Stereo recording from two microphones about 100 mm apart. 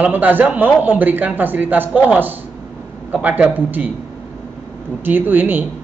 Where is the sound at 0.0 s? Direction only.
15° right (ahead or behind).